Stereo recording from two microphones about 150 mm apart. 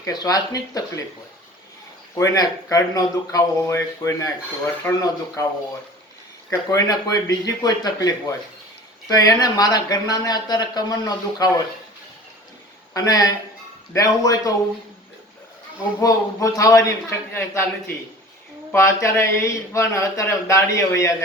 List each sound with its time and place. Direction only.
0.0 s speech: 25° left (ahead or behind)
2.1 s speech: 25° left (ahead or behind)
6.5 s speech: 20° left (ahead or behind)
12.9 s speech: 25° left (ahead or behind)
16.0 s speech: 20° left (ahead or behind)